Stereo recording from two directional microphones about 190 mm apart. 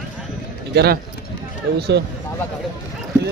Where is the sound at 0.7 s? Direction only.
55° right (ahead or behind).